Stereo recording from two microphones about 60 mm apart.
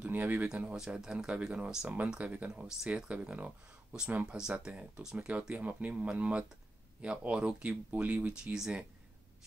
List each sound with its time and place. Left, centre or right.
0.0 s speech: right
0.5 s speech: centre
8.3 s speech: centre